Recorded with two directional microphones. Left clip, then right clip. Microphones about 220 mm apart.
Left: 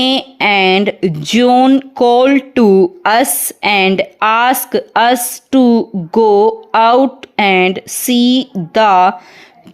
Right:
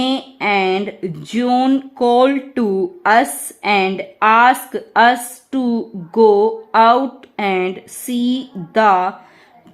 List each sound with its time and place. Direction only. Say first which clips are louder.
0.0 s speech: left 6 dB; 35° left (ahead or behind)